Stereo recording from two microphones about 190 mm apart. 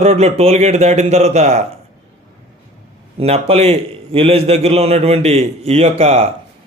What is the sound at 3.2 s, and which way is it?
A man's voice, 35° right (ahead or behind).